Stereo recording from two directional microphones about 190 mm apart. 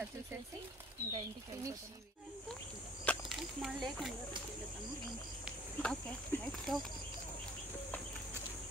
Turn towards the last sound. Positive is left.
turn(degrees=5)  # may be behind; listen again after turning